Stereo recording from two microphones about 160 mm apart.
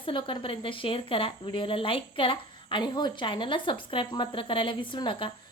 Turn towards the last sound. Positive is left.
turn(degrees=30)  # may be behind; listen again after turning